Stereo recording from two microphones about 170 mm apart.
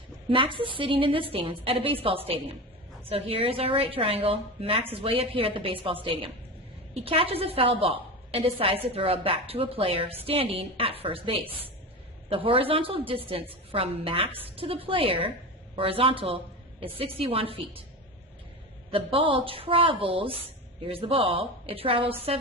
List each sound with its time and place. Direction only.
0.3 s a woman's voice: 30° right (ahead or behind)
18.9 s a woman's voice: 30° right (ahead or behind)